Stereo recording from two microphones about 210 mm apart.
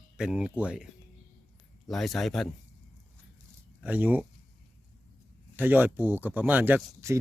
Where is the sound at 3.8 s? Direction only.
5° right (ahead or behind).